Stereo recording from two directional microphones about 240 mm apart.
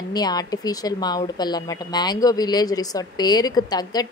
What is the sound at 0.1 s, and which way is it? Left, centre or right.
Speech, centre.